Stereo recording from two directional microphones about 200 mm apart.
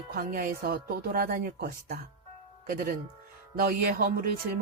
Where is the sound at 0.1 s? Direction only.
45° right (ahead or behind).